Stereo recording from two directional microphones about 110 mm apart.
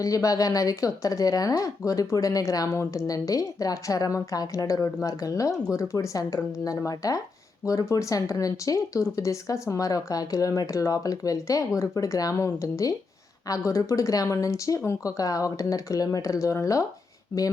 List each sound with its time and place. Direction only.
0.0 s speech: 30° left (ahead or behind)